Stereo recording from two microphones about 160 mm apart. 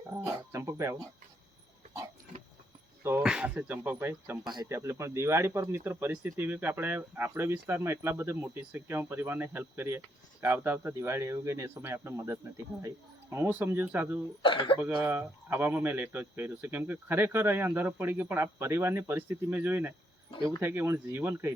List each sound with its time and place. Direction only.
0.3 s music: 20° right (ahead or behind)
3.0 s speech: 15° right (ahead or behind)
4.4 s speech: 25° right (ahead or behind); by 14.2 s 10° right (ahead or behind)
14.4 s speech: 30° left (ahead or behind)
14.8 s speech: 10° right (ahead or behind)